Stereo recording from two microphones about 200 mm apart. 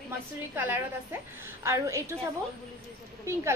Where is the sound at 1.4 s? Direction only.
15° right (ahead or behind).